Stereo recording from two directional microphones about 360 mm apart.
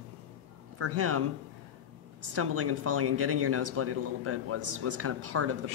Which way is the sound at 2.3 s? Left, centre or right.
Right.